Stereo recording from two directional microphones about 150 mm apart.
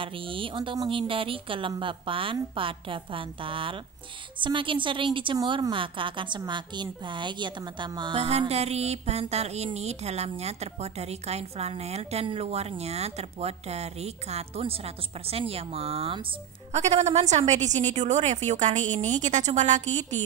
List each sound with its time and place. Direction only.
0.0 s a woman's voice: 35° right (ahead or behind); by 20.2 s 50° right (ahead or behind)